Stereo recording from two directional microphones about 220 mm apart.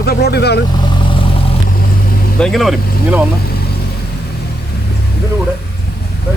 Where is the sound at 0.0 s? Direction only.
45° left (ahead or behind).